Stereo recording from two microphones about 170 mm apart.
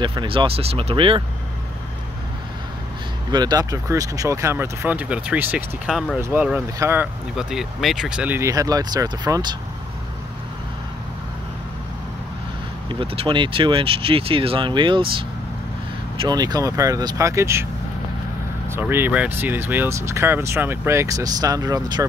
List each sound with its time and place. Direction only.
0.0 s speech: 30° right (ahead or behind)
3.3 s speech: 25° right (ahead or behind)
7.3 s speech: centre (ahead or behind); by 9.6 s 25° right (ahead or behind)
13.0 s speech: 35° right (ahead or behind)
16.2 s speech: 25° right (ahead or behind)
18.7 s speech: 15° right (ahead or behind)